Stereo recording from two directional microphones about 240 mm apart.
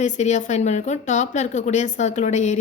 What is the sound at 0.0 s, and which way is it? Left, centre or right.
A woman's voice, left.